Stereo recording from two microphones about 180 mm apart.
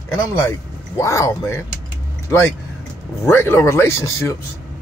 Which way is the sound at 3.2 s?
15° left (ahead or behind).